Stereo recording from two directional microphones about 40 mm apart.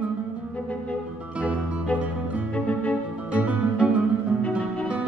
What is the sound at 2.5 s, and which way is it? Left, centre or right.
Music, left.